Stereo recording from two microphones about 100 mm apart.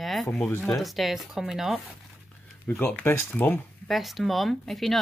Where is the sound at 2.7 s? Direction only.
15° left (ahead or behind).